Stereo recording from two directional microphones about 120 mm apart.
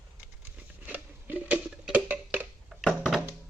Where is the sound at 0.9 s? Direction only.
10° right (ahead or behind).